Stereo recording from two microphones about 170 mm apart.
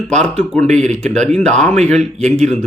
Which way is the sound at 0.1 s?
5° left (ahead or behind).